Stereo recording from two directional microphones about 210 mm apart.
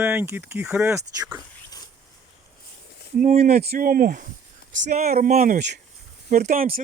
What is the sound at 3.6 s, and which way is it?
Speech, 45° right (ahead or behind).